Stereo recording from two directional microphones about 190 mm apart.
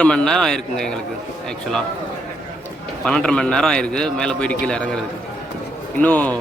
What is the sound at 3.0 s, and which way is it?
A man's voice, 5° left (ahead or behind).